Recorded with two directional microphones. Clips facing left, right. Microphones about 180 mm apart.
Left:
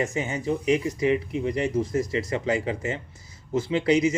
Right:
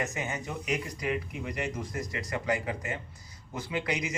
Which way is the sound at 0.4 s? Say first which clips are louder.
Left 10 dB; 25° left (ahead or behind).